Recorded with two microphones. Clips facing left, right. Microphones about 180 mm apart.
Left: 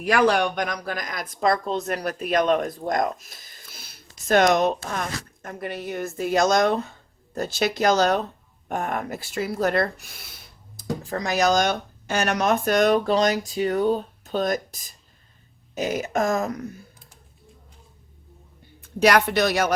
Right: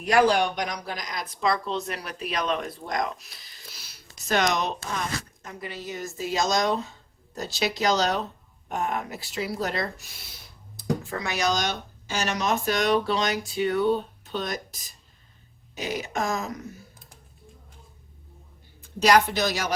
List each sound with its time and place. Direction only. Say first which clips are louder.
0.1 s speech: left 1 dB; 60° left (ahead or behind)
11.0 s speech: left 5 dB; 35° left (ahead or behind)
15.7 s speech: left 5 dB; 45° left (ahead or behind)
19.0 s speech: left 2 dB; 65° left (ahead or behind)